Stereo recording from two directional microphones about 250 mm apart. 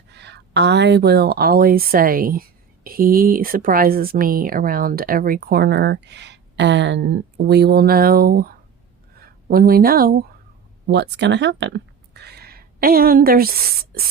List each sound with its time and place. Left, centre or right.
0.1 s speech: right